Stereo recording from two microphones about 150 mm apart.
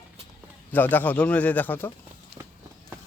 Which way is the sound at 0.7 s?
10° left (ahead or behind).